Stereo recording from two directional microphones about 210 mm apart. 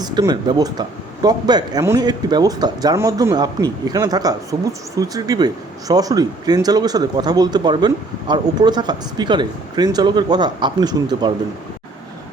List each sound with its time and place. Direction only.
0.0 s speech: 20° right (ahead or behind)